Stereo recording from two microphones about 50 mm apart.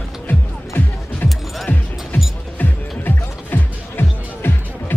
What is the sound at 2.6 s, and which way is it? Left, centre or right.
Music, left.